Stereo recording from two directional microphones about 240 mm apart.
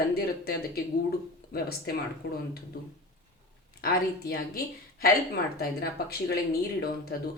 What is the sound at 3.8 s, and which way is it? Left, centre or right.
Speech, left.